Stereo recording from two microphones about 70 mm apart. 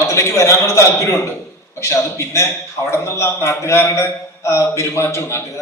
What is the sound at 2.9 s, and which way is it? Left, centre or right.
A man's voice, left.